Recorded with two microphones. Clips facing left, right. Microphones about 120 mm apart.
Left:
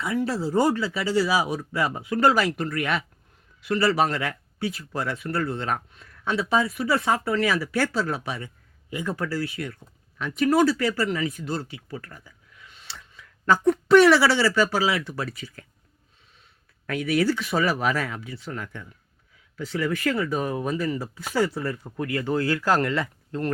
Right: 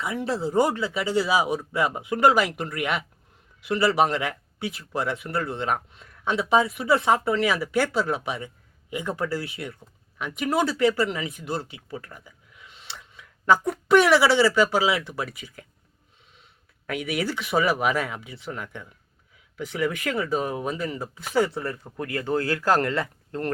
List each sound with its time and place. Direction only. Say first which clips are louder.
0.0 s speech: left 1 dB; 20° right (ahead or behind)
16.8 s speech: left 5 dB; 15° right (ahead or behind); by 23.5 s 40° right (ahead or behind)